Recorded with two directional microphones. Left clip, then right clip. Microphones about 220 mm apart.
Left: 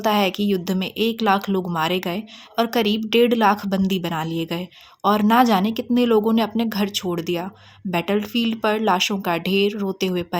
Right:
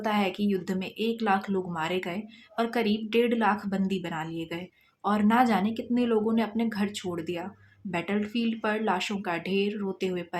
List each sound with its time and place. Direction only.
0.0 s speech: 40° left (ahead or behind)